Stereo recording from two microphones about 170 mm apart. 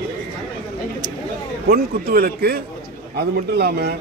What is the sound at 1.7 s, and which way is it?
A man's voice, 65° right (ahead or behind).